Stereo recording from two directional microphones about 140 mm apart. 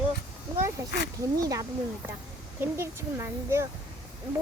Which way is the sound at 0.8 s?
25° right (ahead or behind).